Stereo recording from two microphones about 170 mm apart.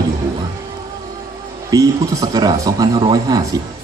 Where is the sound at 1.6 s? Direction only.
20° right (ahead or behind).